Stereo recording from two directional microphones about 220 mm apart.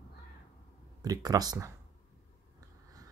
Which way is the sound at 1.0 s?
15° right (ahead or behind).